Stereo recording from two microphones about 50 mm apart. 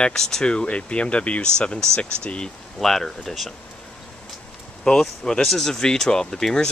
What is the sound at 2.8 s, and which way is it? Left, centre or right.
Speech, centre.